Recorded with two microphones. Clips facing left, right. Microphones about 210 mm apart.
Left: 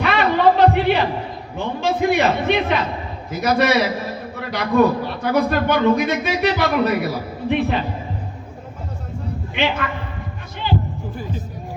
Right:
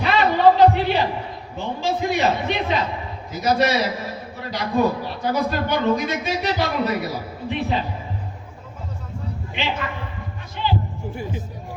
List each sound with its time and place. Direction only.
0.0 s a sound: 60° left (ahead or behind)
1.5 s a man's voice: 55° left (ahead or behind)
9.6 s a man's voice: 55° left (ahead or behind)